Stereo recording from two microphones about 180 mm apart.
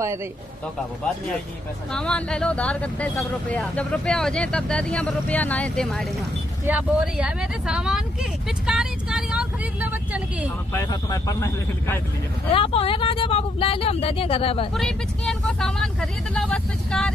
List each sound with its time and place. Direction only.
1.9 s speech: 5° left (ahead or behind)
6.6 s speech: 5° right (ahead or behind)
10.7 s speech: 20° left (ahead or behind)
12.4 s speech: 30° left (ahead or behind)
14.7 s speech: centre (ahead or behind)